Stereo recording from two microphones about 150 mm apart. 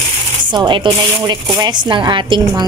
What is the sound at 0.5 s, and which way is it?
A woman's voice, 30° right (ahead or behind).